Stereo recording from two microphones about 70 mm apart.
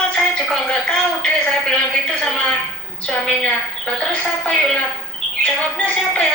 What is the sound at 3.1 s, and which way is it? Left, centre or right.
Speech, centre.